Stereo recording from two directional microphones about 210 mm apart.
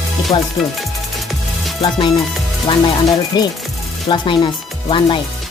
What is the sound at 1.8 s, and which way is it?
Speech, 20° left (ahead or behind).